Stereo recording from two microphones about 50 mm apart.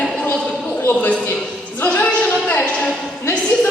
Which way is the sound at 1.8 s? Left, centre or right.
Left.